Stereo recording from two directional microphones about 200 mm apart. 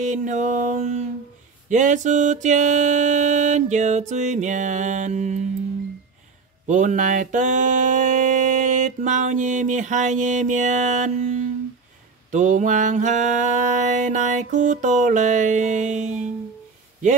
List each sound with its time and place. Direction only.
0.0 s mantra: 35° right (ahead or behind)
6.7 s mantra: 40° right (ahead or behind)